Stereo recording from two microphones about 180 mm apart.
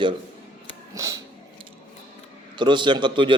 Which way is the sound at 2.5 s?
25° right (ahead or behind).